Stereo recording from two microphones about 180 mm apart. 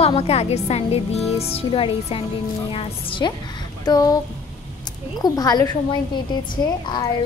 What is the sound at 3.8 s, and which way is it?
Music, 20° left (ahead or behind).